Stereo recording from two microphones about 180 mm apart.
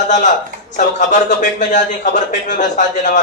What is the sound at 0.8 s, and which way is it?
A man's voice, 45° left (ahead or behind).